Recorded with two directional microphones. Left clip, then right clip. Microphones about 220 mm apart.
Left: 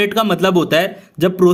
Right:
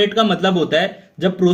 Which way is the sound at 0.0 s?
45° left (ahead or behind).